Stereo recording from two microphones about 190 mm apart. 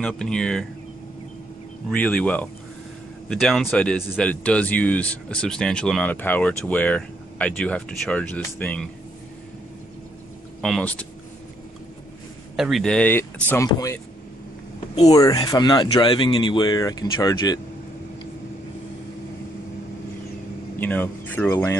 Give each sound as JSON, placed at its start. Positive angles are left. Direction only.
{"t": 0.0, "sound": "speech", "side_deg": 5}
{"t": 1.9, "sound": "speech", "side_deg": 5}
{"t": 10.6, "sound": "speech", "side_deg": 5}
{"t": 12.5, "sound": "speech", "side_deg": 0}
{"t": 15.0, "sound": "speech", "side_deg": 20}
{"t": 20.8, "sound": "speech", "side_deg": 10}